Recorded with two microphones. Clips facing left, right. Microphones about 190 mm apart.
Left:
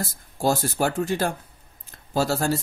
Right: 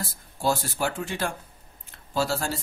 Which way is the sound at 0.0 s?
45° left (ahead or behind).